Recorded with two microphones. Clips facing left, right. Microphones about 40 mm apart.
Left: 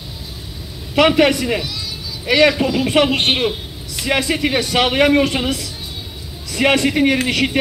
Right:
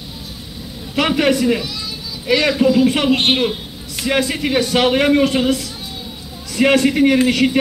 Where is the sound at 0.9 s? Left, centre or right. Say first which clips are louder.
Left 3 dB; left.